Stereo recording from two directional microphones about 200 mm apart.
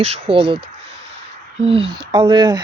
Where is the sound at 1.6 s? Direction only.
30° right (ahead or behind).